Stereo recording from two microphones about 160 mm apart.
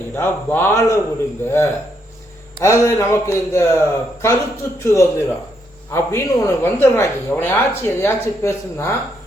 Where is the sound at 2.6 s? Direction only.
20° left (ahead or behind).